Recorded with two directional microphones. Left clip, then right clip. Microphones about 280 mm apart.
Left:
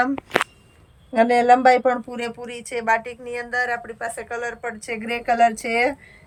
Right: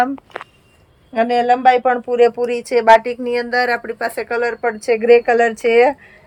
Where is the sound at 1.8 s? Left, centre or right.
Centre.